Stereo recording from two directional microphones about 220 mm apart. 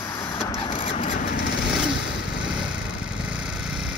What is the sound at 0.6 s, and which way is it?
Printer, 25° left (ahead or behind).